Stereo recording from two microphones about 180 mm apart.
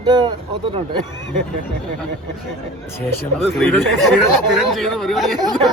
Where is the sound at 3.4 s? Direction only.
5° left (ahead or behind).